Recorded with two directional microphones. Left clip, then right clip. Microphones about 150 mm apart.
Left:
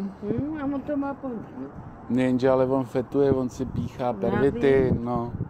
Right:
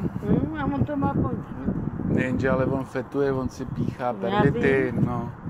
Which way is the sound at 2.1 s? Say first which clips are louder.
Left 3 dB; 35° left (ahead or behind).